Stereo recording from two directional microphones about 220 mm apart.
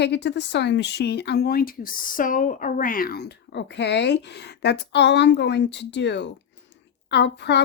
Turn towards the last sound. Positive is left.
turn(degrees=50)  # may be behind; listen again after turning